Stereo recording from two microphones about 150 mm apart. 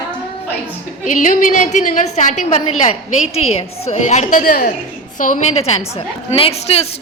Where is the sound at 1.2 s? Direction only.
60° left (ahead or behind).